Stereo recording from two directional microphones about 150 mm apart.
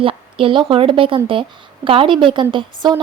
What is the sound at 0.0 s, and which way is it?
A woman's voice, 35° right (ahead or behind).